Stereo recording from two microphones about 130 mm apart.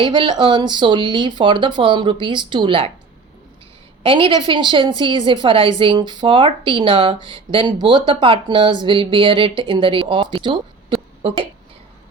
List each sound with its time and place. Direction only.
0.0 s a woman's voice: 35° right (ahead or behind)
4.0 s a woman's voice: 40° right (ahead or behind)